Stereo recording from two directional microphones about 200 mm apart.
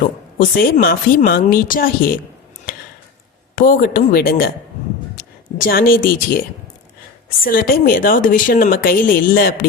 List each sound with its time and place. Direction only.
0.3 s a woman's voice: 45° left (ahead or behind)
3.5 s a woman's voice: 45° left (ahead or behind)
7.4 s a woman's voice: 45° left (ahead or behind)